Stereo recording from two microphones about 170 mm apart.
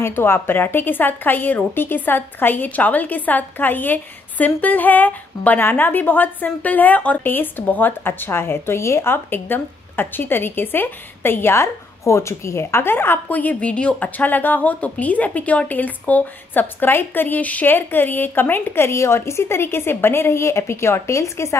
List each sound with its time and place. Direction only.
0.0 s a woman's voice: 15° left (ahead or behind)